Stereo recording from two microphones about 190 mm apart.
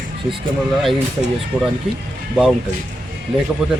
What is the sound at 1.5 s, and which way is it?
Speech, centre (ahead or behind).